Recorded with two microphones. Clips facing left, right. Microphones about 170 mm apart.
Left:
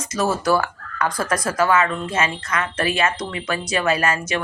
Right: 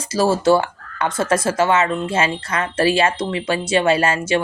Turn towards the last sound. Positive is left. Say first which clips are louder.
# right 4 dB
turn(degrees=-30)  # may be behind; listen again after turning